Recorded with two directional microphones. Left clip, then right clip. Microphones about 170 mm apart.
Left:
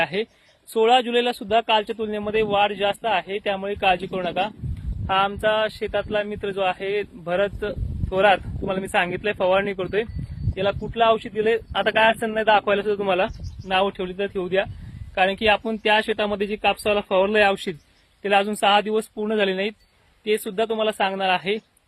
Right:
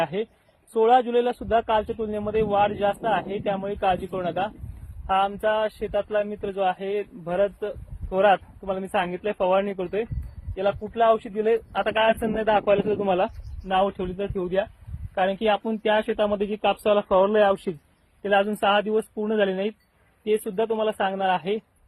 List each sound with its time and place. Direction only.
0.0 s speech: 35° left (ahead or behind)